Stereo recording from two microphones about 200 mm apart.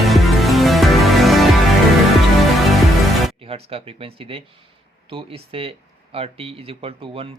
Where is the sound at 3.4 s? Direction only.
30° right (ahead or behind).